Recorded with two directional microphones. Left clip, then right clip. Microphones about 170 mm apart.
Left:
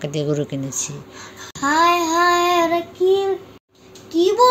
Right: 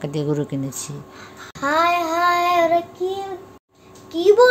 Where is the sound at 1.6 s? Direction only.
20° right (ahead or behind).